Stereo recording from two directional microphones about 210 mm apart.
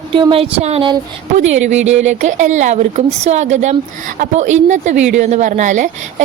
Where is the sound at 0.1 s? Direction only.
25° right (ahead or behind).